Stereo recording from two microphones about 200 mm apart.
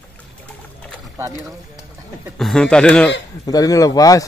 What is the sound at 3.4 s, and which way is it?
Speech, 20° left (ahead or behind).